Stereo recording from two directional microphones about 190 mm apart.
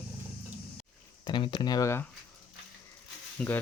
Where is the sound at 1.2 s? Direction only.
25° left (ahead or behind).